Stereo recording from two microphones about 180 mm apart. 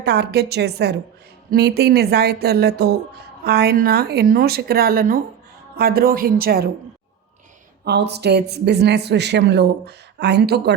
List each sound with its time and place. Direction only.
0.0 s speech: 65° right (ahead or behind)
7.9 s speech: 65° right (ahead or behind)